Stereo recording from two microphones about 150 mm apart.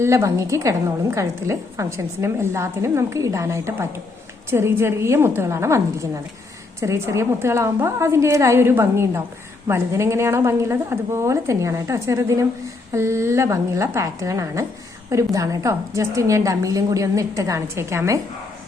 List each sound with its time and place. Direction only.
0.0 s a woman's voice: 20° right (ahead or behind)